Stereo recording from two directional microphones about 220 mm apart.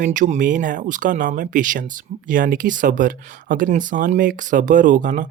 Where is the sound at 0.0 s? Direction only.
35° right (ahead or behind).